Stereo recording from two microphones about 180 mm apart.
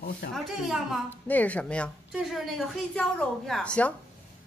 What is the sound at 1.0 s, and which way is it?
A woman's voice, 10° left (ahead or behind).